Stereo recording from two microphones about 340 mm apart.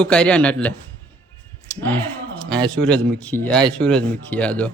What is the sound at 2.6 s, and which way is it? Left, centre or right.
A man's voice, centre.